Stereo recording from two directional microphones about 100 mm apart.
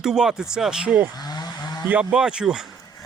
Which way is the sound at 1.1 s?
45° left (ahead or behind).